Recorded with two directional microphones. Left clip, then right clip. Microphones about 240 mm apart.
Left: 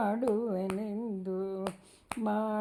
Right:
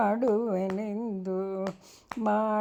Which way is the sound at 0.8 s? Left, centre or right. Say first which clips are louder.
Right 3 dB; right.